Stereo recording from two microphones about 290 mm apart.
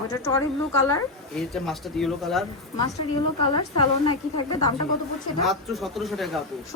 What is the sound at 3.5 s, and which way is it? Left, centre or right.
Speech, centre.